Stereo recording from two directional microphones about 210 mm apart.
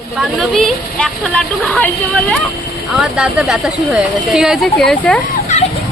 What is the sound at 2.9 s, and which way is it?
Speech, centre (ahead or behind).